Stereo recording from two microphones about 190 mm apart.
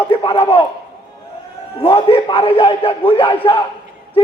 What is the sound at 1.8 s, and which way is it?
A man's voice, 30° left (ahead or behind).